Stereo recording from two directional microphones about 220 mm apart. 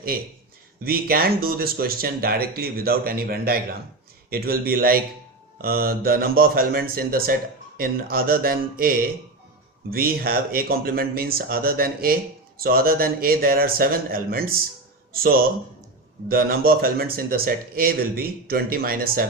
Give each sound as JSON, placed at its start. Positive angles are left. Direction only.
{"t": 0.1, "sound": "speech", "side_deg": -40}